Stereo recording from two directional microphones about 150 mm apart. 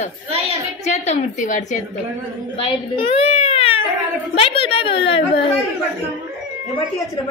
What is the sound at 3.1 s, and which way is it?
Baby cry, 45° left (ahead or behind).